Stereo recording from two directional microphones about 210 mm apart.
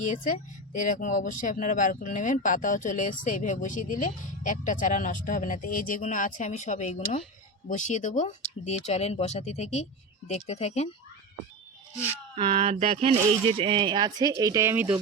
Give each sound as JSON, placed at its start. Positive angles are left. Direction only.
{"t": 0.0, "sound": "speech", "side_deg": 35}
{"t": 12.3, "sound": "speech", "side_deg": -30}